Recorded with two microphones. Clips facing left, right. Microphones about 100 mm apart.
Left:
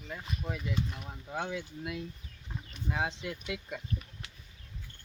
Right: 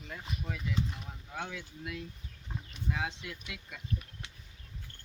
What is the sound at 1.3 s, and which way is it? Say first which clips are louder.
Speech: left 5 dB; 35° left (ahead or behind).